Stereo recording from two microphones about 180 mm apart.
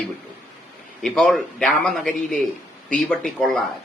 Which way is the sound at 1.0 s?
Centre (ahead or behind).